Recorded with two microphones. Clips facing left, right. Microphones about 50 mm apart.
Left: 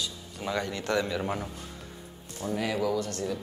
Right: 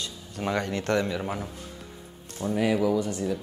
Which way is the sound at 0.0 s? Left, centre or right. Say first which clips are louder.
Right 3 dB; right.